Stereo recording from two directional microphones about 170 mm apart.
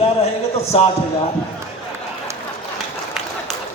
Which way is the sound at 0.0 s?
40° left (ahead or behind).